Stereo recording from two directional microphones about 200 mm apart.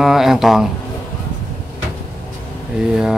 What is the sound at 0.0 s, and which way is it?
Speech, centre (ahead or behind).